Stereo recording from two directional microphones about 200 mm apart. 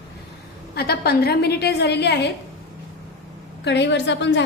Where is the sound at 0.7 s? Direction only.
50° left (ahead or behind).